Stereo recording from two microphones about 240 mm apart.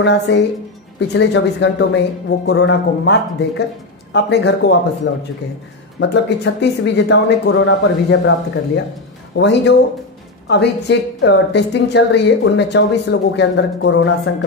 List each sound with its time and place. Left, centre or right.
0.0 s a woman's voice: left
9.4 s a woman's voice: left